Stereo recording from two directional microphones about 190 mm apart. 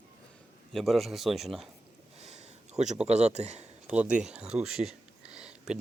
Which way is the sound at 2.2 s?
35° right (ahead or behind).